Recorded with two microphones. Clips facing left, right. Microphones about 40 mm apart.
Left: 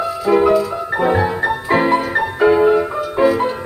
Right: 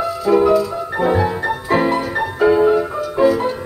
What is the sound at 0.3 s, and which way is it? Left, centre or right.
Music, left.